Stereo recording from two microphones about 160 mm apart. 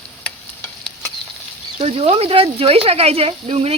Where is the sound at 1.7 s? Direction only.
40° right (ahead or behind).